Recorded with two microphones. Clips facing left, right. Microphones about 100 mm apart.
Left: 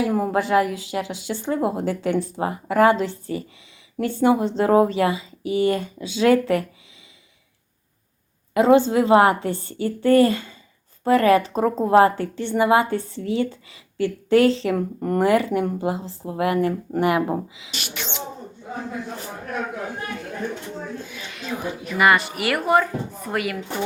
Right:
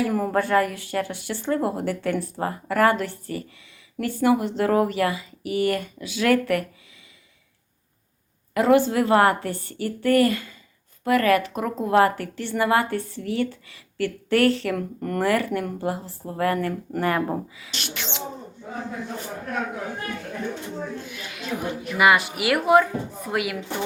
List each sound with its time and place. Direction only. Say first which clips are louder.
0.0 s a woman's voice: left 1 dB; 20° left (ahead or behind)
8.5 s a woman's voice: left 3 dB; 20° left (ahead or behind); by 18.0 s 5° left (ahead or behind)
21.9 s a woman's voice: left 1 dB; 5° right (ahead or behind)